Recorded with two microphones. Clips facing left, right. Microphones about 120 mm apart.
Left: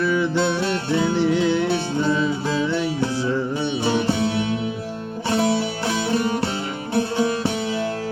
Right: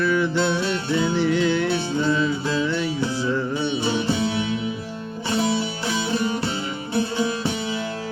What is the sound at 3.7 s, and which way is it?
Music, 60° left (ahead or behind).